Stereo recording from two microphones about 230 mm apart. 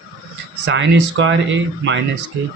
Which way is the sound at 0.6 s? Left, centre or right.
Right.